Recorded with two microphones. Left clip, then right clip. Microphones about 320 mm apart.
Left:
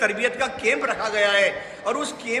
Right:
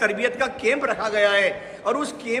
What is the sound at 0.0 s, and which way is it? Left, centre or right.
A man's voice, centre.